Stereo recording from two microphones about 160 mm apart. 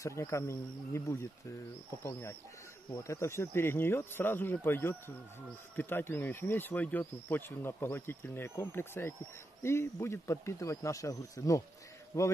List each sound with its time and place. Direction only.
0.0 s speech: 20° left (ahead or behind)